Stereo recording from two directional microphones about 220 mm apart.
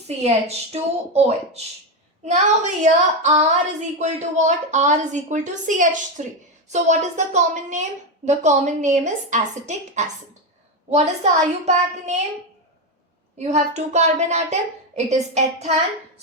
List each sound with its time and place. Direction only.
0.2 s a woman's voice: 30° right (ahead or behind)
13.4 s speech: 30° right (ahead or behind)